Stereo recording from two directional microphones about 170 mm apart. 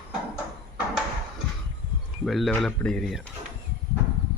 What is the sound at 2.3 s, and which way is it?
Speech, centre (ahead or behind).